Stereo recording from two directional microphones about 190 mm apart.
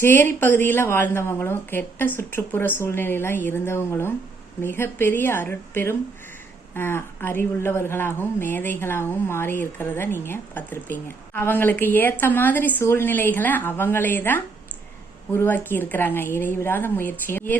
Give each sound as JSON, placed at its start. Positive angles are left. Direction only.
{"t": 0.0, "sound": "a woman's voice", "side_deg": 10}